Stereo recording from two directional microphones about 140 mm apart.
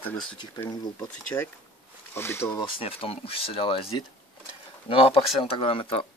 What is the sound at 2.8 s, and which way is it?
Speech, 40° left (ahead or behind).